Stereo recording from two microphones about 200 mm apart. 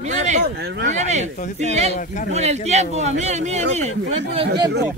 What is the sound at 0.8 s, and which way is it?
Speech, 35° right (ahead or behind).